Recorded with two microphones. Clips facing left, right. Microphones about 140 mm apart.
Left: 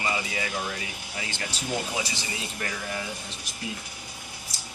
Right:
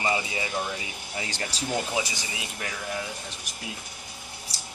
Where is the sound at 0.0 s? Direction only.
25° right (ahead or behind).